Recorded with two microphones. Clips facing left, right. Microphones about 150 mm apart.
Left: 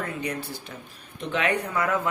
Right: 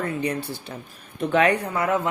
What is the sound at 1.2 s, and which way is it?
Speech, 45° right (ahead or behind).